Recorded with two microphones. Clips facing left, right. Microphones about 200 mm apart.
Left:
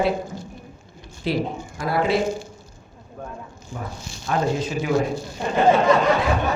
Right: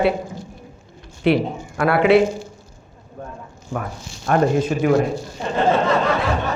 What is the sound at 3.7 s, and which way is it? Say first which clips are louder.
A man's voice: right 6 dB; 60° right (ahead or behind).